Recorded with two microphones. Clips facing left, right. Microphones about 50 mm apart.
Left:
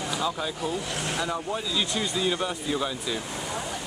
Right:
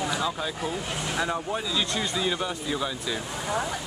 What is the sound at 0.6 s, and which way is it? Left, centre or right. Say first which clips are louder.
Speech: left 1 dB; right.